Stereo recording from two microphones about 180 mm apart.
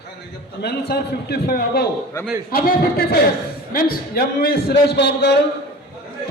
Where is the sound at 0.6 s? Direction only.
65° left (ahead or behind).